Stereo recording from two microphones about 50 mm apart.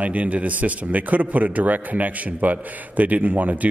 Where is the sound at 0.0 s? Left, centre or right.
Right.